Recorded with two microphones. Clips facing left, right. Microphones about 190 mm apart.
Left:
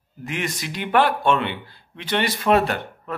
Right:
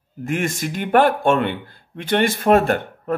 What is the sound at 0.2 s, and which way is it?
Speech, 50° right (ahead or behind).